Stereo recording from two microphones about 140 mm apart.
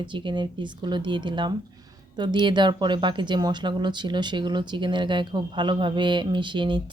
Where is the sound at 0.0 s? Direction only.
35° right (ahead or behind).